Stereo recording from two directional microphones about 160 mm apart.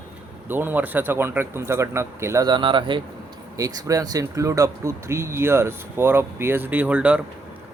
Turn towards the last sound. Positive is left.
turn(degrees=-10)  # may be behind; listen again after turning